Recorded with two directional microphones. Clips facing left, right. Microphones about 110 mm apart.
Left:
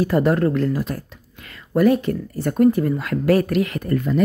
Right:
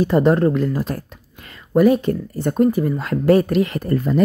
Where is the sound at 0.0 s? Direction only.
25° right (ahead or behind).